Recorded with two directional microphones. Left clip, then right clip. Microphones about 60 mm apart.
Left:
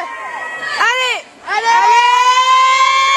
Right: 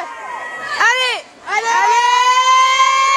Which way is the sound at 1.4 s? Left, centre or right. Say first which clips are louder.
Left 3 dB; centre.